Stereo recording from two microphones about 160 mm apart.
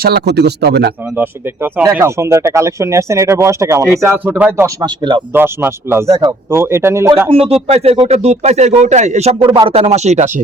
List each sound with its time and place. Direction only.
0.0 s speech: 85° right
1.1 s speech: 10° right (ahead or behind)
4.8 s speech: 30° right (ahead or behind)
5.3 s speech: 15° right (ahead or behind)
7.3 s speech: 35° right (ahead or behind)